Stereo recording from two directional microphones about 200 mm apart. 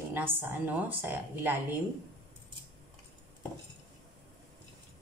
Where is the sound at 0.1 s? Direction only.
10° right (ahead or behind).